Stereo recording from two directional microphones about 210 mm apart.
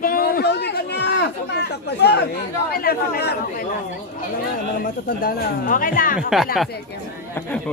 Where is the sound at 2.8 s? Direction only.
45° left (ahead or behind).